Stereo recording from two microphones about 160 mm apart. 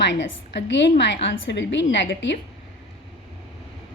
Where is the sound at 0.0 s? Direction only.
90° left.